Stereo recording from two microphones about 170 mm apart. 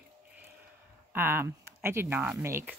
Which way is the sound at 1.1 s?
15° right (ahead or behind).